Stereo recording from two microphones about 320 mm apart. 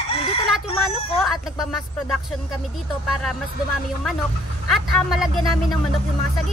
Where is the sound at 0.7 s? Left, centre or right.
Centre.